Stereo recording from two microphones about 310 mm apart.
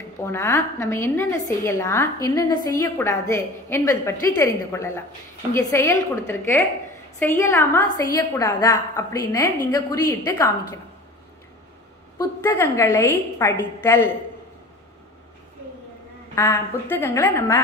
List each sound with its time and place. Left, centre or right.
0.2 s a woman's voice: centre
12.2 s a woman's voice: centre
16.3 s a woman's voice: centre